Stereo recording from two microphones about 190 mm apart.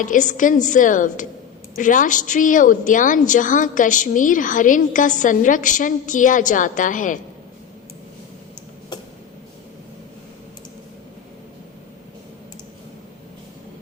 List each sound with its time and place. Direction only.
0.0 s a woman's voice: 40° left (ahead or behind)